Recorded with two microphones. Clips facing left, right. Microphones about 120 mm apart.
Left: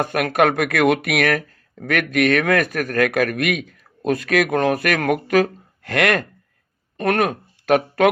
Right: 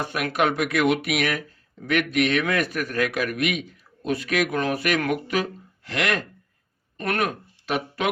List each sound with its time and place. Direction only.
0.0 s speech: 50° left (ahead or behind)